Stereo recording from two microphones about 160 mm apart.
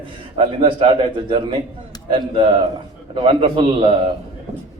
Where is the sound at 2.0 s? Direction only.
30° right (ahead or behind).